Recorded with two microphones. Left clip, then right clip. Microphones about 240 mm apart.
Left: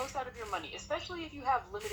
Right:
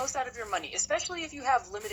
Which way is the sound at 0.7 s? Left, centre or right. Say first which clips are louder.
Right 7 dB; right.